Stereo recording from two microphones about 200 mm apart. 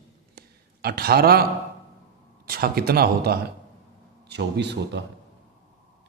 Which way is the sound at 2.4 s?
50° right (ahead or behind).